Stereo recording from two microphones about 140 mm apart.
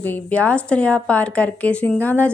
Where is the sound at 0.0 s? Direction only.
10° left (ahead or behind).